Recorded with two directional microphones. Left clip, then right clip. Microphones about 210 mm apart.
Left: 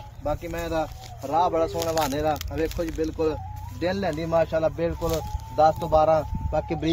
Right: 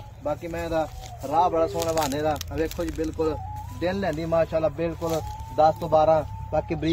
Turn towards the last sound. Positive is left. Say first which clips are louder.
# even
turn(degrees=15)  # may be behind; listen again after turning